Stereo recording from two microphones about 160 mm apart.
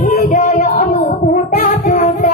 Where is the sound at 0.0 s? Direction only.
55° left (ahead or behind).